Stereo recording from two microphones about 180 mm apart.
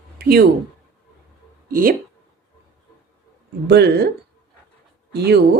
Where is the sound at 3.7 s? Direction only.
65° right (ahead or behind).